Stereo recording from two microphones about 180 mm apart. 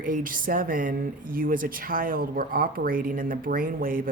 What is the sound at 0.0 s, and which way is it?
Speech, 50° right (ahead or behind).